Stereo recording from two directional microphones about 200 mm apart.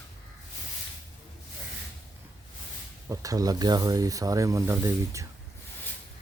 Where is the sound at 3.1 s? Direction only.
15° right (ahead or behind).